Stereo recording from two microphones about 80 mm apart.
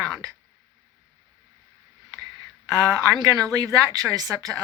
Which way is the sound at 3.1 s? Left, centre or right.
Right.